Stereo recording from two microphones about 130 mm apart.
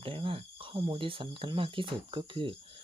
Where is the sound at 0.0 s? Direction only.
45° right (ahead or behind).